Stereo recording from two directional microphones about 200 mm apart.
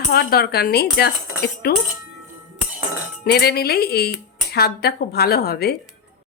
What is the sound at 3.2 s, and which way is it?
Speech, 50° left (ahead or behind).